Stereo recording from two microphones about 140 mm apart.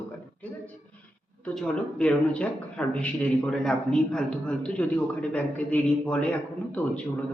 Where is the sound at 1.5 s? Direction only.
5° left (ahead or behind).